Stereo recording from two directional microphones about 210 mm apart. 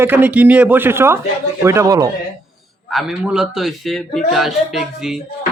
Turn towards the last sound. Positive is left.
turn(degrees=0)  # may be behind; listen again after turning